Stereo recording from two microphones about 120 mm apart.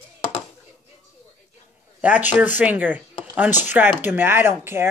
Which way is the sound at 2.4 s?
15° right (ahead or behind).